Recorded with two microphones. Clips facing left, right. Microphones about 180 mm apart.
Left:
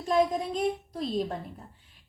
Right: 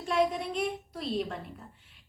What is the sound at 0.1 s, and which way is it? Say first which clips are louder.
A woman's voice: left 3 dB; 35° left (ahead or behind).